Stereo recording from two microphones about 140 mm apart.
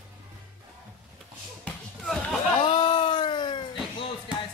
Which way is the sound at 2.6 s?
35° left (ahead or behind).